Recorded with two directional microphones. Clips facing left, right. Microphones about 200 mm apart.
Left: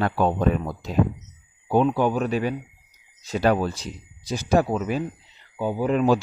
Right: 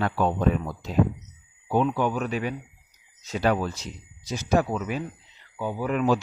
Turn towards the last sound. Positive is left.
turn(degrees=30)  # may be behind; listen again after turning